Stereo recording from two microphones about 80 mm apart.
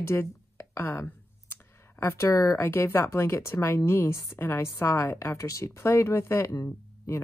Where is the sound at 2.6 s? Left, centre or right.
Left.